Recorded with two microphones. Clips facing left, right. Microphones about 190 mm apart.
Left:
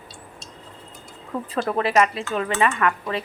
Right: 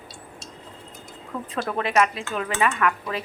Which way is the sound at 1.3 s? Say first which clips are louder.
Left 4 dB; 20° left (ahead or behind).